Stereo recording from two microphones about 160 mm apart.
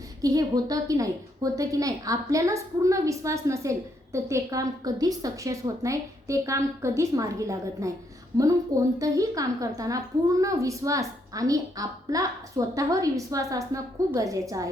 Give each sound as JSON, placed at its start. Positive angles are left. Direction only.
{"t": 0.2, "sound": "a woman's voice", "side_deg": -20}